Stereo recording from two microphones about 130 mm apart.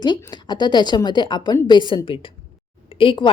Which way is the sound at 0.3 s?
35° left (ahead or behind).